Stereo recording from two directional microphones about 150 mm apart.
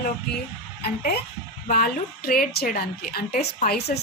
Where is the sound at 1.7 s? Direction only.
80° left.